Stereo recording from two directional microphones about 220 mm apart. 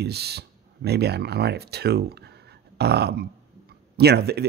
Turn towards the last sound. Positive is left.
turn(degrees=-45)  # may be behind; listen again after turning